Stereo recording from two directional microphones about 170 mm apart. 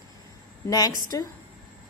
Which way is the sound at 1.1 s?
20° left (ahead or behind).